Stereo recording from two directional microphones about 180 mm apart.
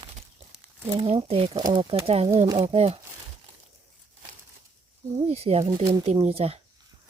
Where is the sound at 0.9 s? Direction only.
30° right (ahead or behind).